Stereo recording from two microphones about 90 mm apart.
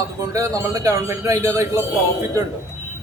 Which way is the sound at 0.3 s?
35° right (ahead or behind).